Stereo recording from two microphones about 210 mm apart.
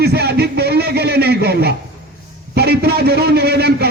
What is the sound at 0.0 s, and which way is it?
A man's voice, 50° right (ahead or behind).